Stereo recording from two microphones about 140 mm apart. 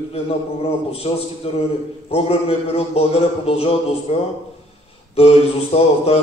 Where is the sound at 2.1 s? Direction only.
45° left (ahead or behind).